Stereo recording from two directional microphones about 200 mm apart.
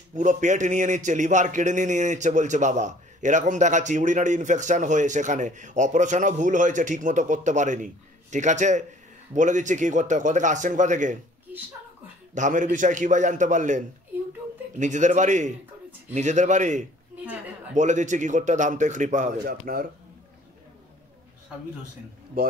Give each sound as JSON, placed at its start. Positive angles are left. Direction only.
{"t": 0.1, "sound": "a man's voice", "side_deg": -35}
{"t": 12.4, "sound": "a man's voice", "side_deg": -40}
{"t": 19.6, "sound": "speech", "side_deg": -50}